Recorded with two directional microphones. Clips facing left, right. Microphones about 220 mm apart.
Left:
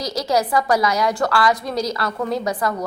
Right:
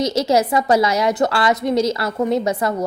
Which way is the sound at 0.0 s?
25° right (ahead or behind).